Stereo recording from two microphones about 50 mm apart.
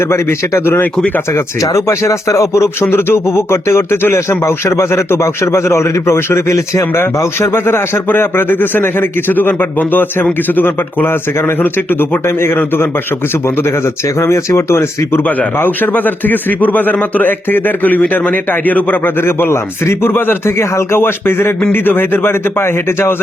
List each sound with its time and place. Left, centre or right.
0.0 s a man's voice: left
1.3 s speech: left
2.6 s a man's voice: left
7.5 s a man's voice: left
11.6 s speech: left
12.2 s a man's voice: left
12.5 s a man's voice: left
13.6 s a man's voice: left
15.5 s speech: left
19.2 s a man's voice: left
21.0 s a man's voice: left